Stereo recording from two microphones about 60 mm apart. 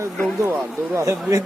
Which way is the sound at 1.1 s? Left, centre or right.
Right.